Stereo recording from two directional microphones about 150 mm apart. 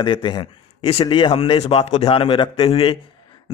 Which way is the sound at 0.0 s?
30° left (ahead or behind).